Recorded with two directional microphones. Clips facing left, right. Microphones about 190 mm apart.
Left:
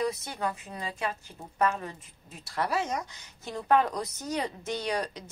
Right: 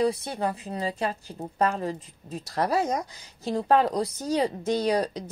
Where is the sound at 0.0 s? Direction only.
30° right (ahead or behind).